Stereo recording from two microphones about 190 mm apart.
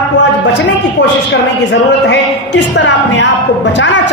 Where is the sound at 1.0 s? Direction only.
65° left (ahead or behind).